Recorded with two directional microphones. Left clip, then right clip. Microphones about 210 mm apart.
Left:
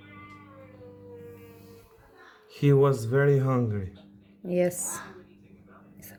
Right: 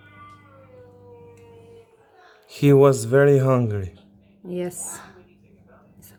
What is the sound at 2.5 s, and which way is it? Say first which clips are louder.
Speech: right 7 dB; 40° right (ahead or behind).